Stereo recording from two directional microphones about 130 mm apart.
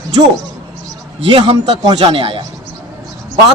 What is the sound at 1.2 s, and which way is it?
A man's voice, 40° right (ahead or behind).